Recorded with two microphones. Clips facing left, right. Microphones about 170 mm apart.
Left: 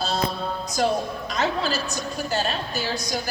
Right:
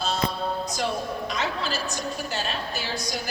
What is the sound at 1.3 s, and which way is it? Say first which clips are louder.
A woman's voice: left 7 dB; 40° left (ahead or behind).